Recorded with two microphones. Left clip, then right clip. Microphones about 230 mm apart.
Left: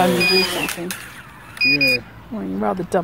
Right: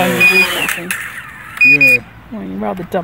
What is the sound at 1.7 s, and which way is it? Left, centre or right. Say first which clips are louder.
Speech: right 8 dB; right.